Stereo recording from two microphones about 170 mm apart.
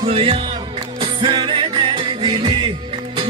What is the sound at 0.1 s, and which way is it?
Speech, 35° right (ahead or behind).